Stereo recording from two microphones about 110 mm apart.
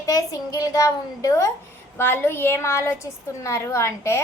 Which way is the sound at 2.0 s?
20° left (ahead or behind).